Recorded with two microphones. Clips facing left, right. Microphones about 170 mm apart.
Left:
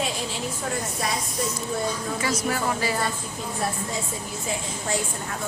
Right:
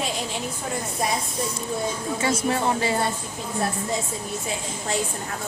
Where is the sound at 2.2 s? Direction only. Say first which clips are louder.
Right 4 dB; 25° right (ahead or behind).